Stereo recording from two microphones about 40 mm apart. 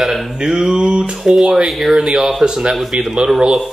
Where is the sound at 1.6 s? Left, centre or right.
Centre.